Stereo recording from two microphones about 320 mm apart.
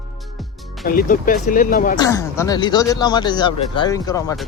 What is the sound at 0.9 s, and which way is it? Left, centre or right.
Speech, left.